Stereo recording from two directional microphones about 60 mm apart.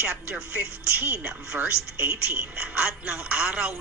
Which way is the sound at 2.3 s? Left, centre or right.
Right.